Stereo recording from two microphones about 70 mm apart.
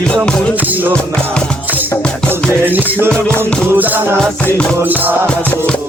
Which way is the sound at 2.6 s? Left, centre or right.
Right.